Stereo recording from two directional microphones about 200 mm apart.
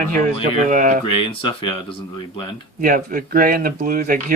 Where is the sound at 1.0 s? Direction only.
25° left (ahead or behind).